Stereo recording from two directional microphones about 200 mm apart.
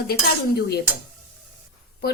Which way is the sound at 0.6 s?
50° left (ahead or behind).